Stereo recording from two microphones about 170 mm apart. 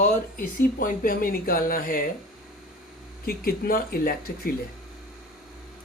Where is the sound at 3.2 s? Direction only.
60° left (ahead or behind).